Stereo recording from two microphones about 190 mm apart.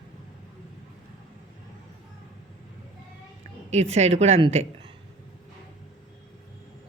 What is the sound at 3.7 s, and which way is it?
Speech, 35° right (ahead or behind).